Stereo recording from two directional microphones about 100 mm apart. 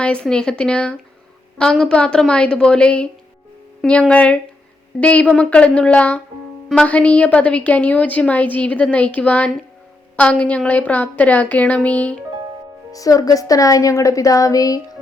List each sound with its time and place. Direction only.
0.0 s a woman's voice: 10° left (ahead or behind)
12.9 s speech: 35° left (ahead or behind)